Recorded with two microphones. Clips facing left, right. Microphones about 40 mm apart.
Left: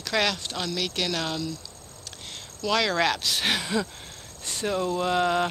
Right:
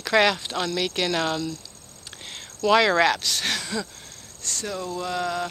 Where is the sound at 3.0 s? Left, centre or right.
Centre.